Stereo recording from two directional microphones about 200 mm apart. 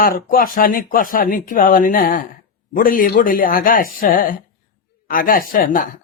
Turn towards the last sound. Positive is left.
turn(degrees=45)  # may be behind; listen again after turning